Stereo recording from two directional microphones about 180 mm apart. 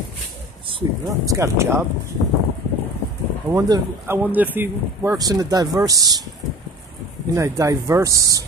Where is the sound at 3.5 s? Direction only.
20° right (ahead or behind).